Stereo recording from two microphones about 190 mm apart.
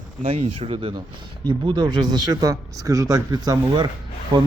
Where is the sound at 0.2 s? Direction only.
30° right (ahead or behind).